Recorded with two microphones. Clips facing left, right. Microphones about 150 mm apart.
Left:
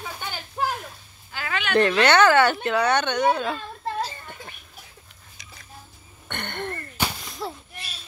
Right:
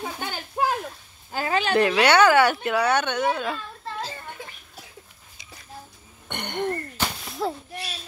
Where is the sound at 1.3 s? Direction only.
35° right (ahead or behind).